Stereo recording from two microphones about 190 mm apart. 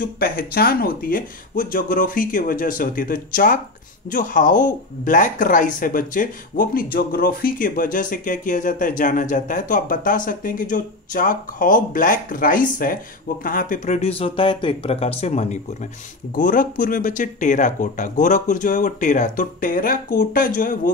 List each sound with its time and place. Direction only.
0.0 s speech: 50° left (ahead or behind)